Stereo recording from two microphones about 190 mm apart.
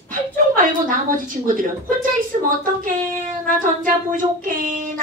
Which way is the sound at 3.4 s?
45° right (ahead or behind).